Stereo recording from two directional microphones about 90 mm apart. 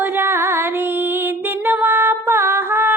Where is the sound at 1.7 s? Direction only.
20° right (ahead or behind).